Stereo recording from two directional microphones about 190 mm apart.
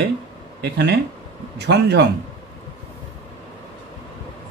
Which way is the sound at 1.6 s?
60° right (ahead or behind).